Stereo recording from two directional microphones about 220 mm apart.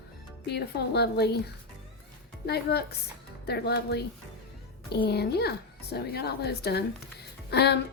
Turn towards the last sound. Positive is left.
turn(degrees=50)  # may be behind; listen again after turning